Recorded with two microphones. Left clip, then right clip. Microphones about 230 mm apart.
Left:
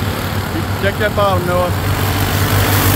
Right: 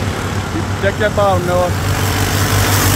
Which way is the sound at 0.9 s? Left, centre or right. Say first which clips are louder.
Right 1 dB; centre.